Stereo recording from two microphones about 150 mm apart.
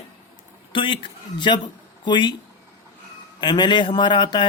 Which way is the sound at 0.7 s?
35° left (ahead or behind).